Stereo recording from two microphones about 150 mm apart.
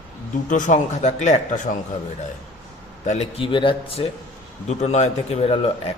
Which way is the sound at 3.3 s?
35° left (ahead or behind).